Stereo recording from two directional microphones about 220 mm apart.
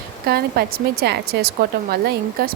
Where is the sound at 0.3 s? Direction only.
45° right (ahead or behind).